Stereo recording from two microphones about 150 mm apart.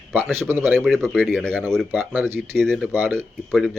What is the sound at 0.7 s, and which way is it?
Speech, centre (ahead or behind).